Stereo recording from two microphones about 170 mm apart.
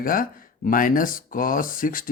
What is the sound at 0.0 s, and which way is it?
Speech, 55° left (ahead or behind).